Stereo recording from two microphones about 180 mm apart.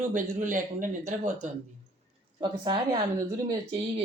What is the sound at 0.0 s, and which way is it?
Speech, 45° right (ahead or behind).